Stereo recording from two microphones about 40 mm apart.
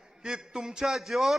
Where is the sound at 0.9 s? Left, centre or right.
Centre.